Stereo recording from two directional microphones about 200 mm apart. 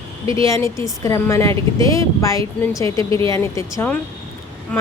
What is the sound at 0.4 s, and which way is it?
Speech, 15° left (ahead or behind).